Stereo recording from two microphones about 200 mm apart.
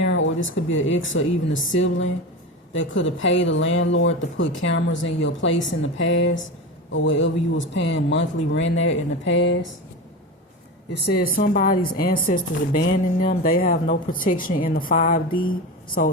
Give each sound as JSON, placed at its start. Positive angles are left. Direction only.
{"t": 0.0, "sound": "speech", "side_deg": 70}
{"t": 11.0, "sound": "speech", "side_deg": 50}